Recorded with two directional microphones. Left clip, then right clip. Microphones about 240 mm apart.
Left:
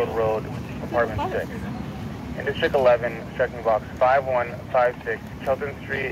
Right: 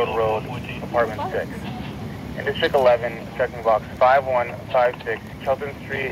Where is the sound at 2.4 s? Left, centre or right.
Centre.